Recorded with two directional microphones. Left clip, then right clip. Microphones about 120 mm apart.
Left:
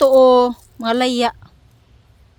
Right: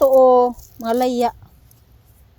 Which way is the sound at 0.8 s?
30° left (ahead or behind).